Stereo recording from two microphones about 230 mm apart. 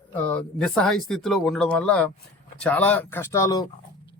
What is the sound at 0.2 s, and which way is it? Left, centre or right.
Speech, centre.